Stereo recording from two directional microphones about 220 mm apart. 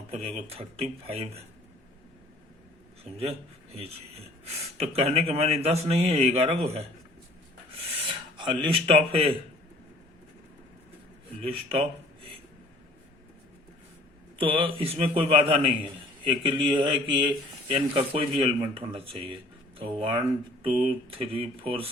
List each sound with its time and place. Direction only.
0.1 s a man's voice: 25° right (ahead or behind)
4.8 s a man's voice: 30° right (ahead or behind)
8.0 s filing: 20° right (ahead or behind)
8.6 s a man's voice: 25° right (ahead or behind)
11.4 s a man's voice: 25° right (ahead or behind)
14.3 s a man's voice: 25° right (ahead or behind)